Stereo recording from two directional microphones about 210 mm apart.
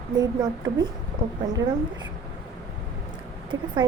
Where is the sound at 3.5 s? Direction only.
65° right (ahead or behind).